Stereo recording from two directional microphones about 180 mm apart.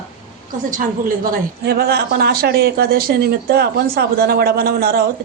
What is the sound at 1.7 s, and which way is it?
A woman's voice, 60° right (ahead or behind).